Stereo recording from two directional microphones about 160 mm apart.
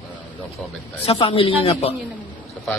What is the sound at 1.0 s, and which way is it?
Speech, 35° left (ahead or behind).